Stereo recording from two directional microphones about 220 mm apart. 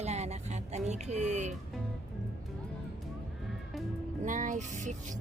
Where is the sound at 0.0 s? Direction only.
30° right (ahead or behind).